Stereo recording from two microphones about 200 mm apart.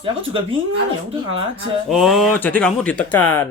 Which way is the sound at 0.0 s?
25° right (ahead or behind).